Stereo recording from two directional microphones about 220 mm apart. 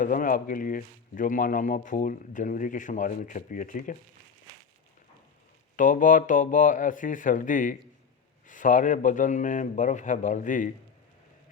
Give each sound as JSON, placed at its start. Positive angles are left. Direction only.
{"t": 0.0, "sound": "speech", "side_deg": 35}
{"t": 5.7, "sound": "speech", "side_deg": 35}